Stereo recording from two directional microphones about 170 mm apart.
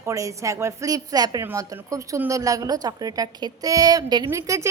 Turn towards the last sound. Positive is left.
turn(degrees=-20)  # may be behind; listen again after turning